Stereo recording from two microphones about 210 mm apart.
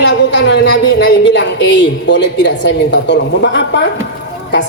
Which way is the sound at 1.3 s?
60° left (ahead or behind).